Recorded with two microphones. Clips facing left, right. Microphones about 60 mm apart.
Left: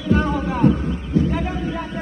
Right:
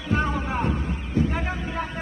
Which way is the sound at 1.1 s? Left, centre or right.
Right.